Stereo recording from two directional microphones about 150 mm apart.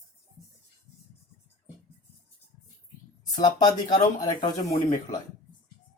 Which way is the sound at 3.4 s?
25° left (ahead or behind).